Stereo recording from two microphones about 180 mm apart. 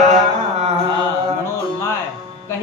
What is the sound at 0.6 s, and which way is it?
Carnatic music, 35° right (ahead or behind).